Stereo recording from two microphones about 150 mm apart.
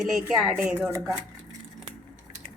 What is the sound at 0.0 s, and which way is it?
Speech, centre (ahead or behind).